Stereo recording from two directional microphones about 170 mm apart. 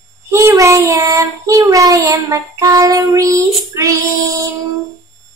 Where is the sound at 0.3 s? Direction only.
20° right (ahead or behind).